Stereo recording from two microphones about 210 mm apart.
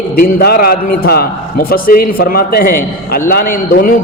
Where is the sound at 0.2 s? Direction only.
45° left (ahead or behind).